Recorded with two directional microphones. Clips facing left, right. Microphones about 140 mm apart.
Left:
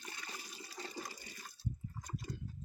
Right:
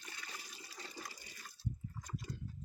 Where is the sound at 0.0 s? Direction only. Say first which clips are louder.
Left 3 dB; 45° left (ahead or behind).